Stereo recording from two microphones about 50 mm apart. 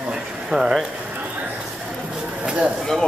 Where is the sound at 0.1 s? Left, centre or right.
Centre.